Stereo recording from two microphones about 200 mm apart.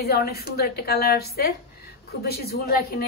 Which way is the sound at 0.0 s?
50° left (ahead or behind).